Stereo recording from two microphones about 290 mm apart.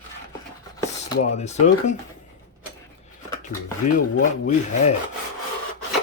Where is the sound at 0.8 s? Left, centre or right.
Left.